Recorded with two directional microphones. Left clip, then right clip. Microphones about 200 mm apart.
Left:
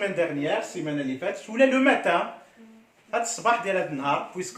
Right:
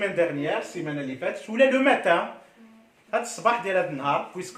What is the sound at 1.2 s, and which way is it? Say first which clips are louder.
Speech: right 1 dB; 15° right (ahead or behind).